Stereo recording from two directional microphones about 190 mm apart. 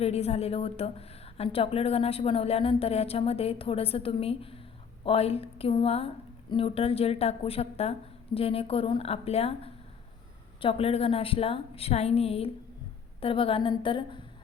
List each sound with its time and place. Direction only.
0.0 s a woman's voice: 35° left (ahead or behind)